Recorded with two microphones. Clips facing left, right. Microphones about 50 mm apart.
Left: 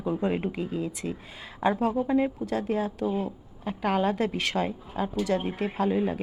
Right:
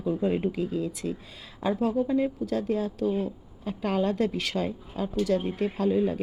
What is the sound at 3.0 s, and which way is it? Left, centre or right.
Speech, centre.